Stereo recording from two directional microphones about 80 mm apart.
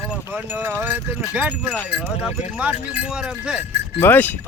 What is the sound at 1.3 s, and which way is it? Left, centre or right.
Speech, centre.